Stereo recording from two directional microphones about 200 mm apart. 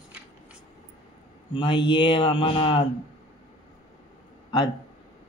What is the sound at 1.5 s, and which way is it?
Mantra, 25° left (ahead or behind).